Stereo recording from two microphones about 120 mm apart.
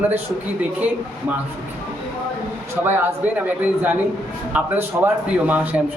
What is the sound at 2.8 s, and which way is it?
Speech, 20° right (ahead or behind).